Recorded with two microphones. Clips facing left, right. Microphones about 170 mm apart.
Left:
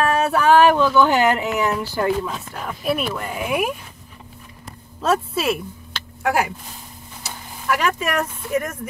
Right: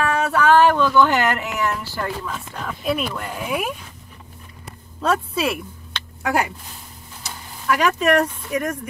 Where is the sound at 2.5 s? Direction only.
5° left (ahead or behind).